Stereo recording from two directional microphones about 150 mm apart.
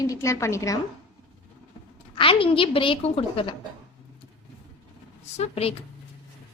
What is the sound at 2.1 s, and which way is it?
A woman's voice, 35° left (ahead or behind).